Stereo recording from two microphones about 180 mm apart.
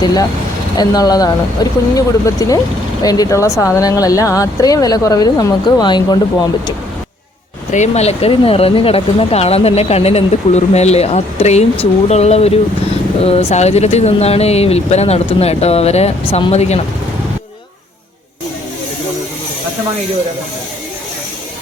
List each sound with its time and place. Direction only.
0.0 s speech: 20° left (ahead or behind)
7.7 s speech: 40° left (ahead or behind)